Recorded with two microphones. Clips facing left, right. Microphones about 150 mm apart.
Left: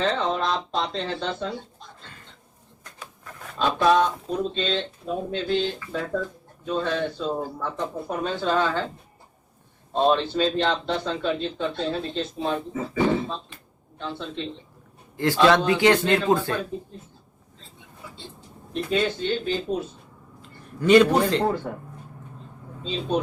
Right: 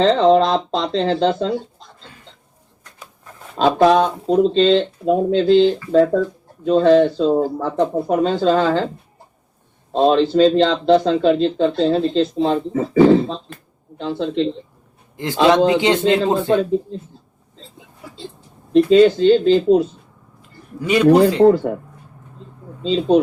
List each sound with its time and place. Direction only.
0.0 s a man's voice: 90° right
3.6 s a man's voice: 85° right
9.9 s a man's voice: 90° right
15.1 s a man's voice: 20° right (ahead or behind)
18.7 s a man's voice: 90° right
20.8 s a man's voice: 10° right (ahead or behind)
21.1 s a man's voice: 90° right
22.8 s a man's voice: 90° right